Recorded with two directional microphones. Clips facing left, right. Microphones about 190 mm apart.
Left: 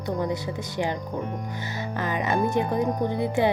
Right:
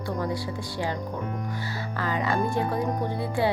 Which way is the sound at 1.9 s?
20° left (ahead or behind).